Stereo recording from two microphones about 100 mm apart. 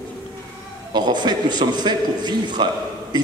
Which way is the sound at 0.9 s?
45° right (ahead or behind).